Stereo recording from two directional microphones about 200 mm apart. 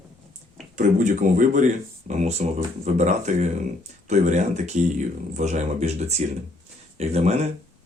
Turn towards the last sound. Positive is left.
turn(degrees=-35)  # may be behind; listen again after turning